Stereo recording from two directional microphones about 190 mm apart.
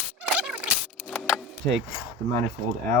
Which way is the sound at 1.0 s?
5° left (ahead or behind).